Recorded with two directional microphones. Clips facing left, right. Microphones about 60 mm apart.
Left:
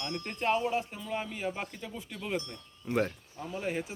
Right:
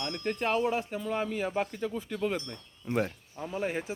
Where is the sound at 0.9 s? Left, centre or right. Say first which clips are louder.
Right 5 dB; right.